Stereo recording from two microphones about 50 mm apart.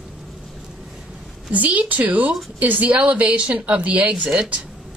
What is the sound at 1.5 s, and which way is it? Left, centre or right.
A woman's voice, right.